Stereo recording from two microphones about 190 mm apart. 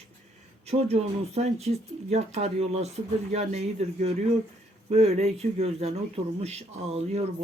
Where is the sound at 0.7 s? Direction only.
35° right (ahead or behind).